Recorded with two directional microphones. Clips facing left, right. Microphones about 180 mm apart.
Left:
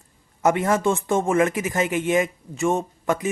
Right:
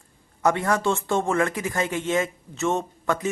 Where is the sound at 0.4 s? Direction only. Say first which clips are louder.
Left 2 dB; 20° left (ahead or behind).